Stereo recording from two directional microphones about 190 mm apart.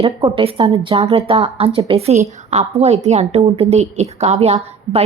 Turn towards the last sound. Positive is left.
turn(degrees=-35)  # may be behind; listen again after turning